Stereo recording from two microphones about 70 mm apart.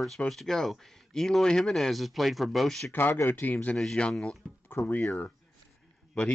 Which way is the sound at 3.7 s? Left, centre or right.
Centre.